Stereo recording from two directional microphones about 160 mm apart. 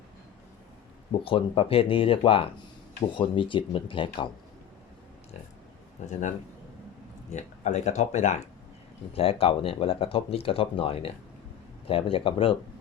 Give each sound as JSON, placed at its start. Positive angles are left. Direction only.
{"t": 1.2, "sound": "speech", "side_deg": 35}
{"t": 7.3, "sound": "speech", "side_deg": 45}
{"t": 9.1, "sound": "speech", "side_deg": 35}